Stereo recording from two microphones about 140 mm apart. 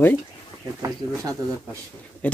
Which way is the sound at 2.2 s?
10° left (ahead or behind).